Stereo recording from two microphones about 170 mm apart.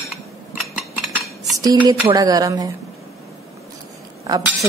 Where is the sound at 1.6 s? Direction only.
25° right (ahead or behind).